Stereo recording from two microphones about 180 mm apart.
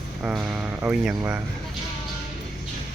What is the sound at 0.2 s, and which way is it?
Speech, 5° right (ahead or behind).